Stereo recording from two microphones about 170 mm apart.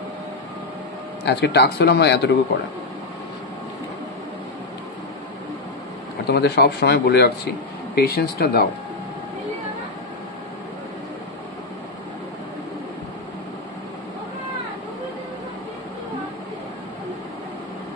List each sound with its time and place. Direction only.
1.2 s speech: 80° left
6.2 s speech: 75° left (ahead or behind)